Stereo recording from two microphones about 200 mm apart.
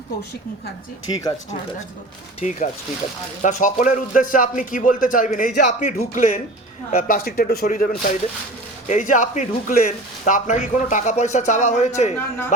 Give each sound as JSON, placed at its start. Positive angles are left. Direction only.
{"t": 1.1, "sound": "speech", "side_deg": 25}
{"t": 2.4, "sound": "speech", "side_deg": 35}